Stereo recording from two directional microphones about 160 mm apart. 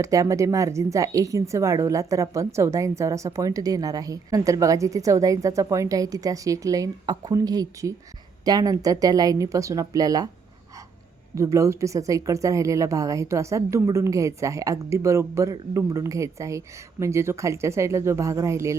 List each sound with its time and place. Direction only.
0.0 s a woman's voice: 20° right (ahead or behind)
11.3 s a woman's voice: 20° right (ahead or behind)